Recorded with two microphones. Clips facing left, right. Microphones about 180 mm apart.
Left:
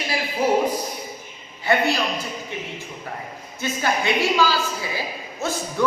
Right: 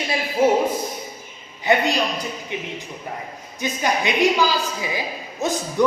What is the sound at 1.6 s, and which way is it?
Speech, 20° right (ahead or behind).